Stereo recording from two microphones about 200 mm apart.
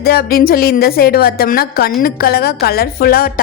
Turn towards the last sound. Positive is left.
turn(degrees=50)  # may be behind; listen again after turning